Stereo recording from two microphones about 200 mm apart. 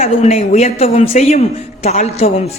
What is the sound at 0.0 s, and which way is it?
A woman's voice, 30° left (ahead or behind).